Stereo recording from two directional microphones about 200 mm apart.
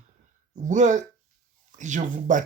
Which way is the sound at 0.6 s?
35° right (ahead or behind).